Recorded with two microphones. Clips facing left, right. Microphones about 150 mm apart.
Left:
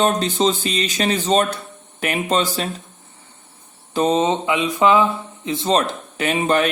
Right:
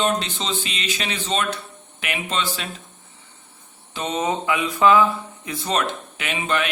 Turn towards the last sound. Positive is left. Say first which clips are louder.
# left 6 dB
turn(degrees=40)  # may be behind; listen again after turning